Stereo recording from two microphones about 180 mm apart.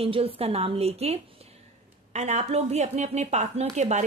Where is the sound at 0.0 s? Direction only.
30° right (ahead or behind).